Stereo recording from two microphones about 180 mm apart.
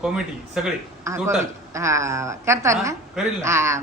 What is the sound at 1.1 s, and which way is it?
A woman's voice, 15° right (ahead or behind).